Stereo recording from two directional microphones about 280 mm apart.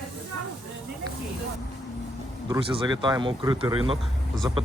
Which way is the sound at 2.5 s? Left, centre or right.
Centre.